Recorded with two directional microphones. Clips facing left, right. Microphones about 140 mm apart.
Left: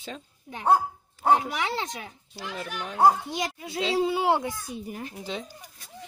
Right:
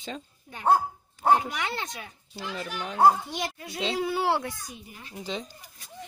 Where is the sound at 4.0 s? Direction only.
20° left (ahead or behind).